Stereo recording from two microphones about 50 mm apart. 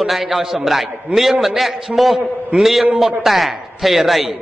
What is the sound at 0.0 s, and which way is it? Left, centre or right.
A man's voice, centre.